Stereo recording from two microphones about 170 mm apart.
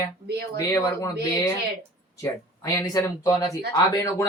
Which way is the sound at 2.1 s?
20° left (ahead or behind).